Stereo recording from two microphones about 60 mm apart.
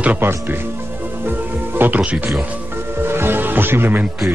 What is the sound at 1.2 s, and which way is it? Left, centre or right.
Music, right.